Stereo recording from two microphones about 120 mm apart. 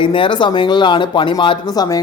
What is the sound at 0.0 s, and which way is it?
A man's voice, 45° left (ahead or behind).